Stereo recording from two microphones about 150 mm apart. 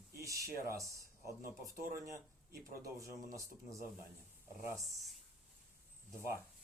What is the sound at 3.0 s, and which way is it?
Speech, 20° right (ahead or behind).